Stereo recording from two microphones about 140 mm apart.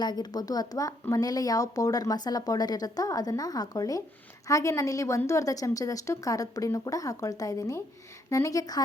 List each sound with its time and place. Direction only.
0.0 s speech: 30° left (ahead or behind)